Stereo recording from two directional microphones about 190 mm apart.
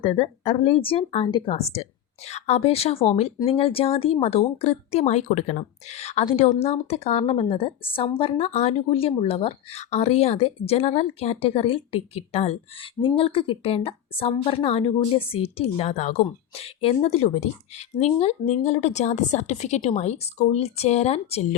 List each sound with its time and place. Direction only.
0.0 s speech: 30° left (ahead or behind)